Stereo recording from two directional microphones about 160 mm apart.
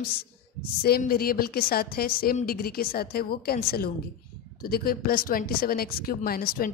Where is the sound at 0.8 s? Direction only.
70° left (ahead or behind).